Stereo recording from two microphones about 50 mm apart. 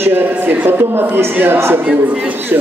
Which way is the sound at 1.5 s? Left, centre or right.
Right.